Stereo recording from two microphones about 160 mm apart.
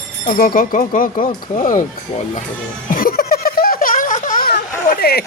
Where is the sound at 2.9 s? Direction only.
70° left (ahead or behind).